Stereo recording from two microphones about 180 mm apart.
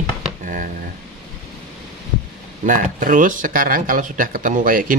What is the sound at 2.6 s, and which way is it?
Speech, 50° right (ahead or behind).